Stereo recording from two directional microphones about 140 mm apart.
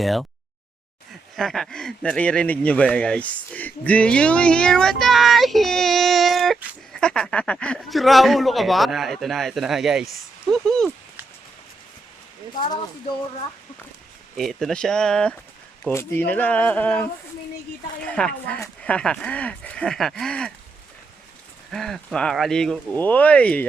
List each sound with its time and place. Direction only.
0.0 s speech: centre (ahead or behind)
1.4 s speech: 5° left (ahead or behind)
14.3 s speech: centre (ahead or behind)
15.9 s speech: 15° left (ahead or behind)
21.7 s speech: 5° left (ahead or behind)